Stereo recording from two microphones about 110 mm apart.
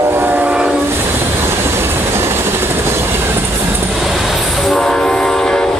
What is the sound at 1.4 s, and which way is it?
Train, 20° right (ahead or behind).